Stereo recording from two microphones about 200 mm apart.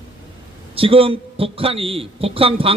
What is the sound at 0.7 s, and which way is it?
Speech, 25° right (ahead or behind).